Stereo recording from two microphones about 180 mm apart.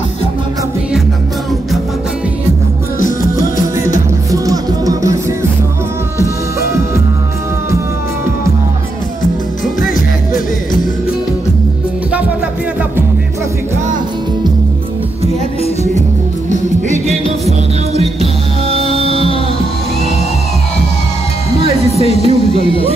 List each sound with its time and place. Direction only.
3.5 s music: 45° left (ahead or behind)
4.3 s music: 20° right (ahead or behind)
16.4 s music: 40° right (ahead or behind)
22.2 s music: 30° right (ahead or behind)